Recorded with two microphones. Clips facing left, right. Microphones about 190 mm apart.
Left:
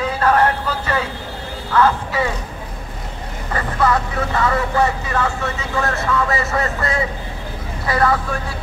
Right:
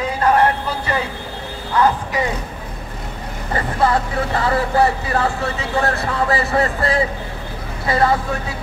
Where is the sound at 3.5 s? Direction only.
30° right (ahead or behind).